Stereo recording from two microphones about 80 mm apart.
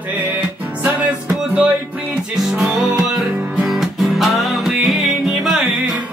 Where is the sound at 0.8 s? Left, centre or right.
Centre.